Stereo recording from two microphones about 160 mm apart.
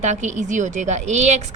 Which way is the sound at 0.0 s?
45° right (ahead or behind).